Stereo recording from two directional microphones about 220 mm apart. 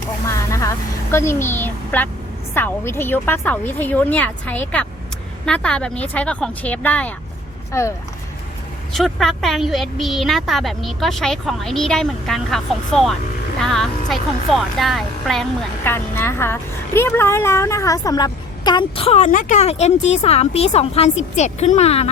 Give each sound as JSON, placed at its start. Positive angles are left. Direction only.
{"t": 0.3, "sound": "a woman's voice", "side_deg": 15}
{"t": 8.9, "sound": "speech", "side_deg": 0}